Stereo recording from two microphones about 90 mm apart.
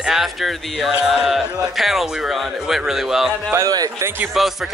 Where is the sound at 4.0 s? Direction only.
30° right (ahead or behind).